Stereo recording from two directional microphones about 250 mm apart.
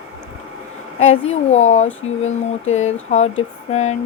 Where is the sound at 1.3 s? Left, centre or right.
Left.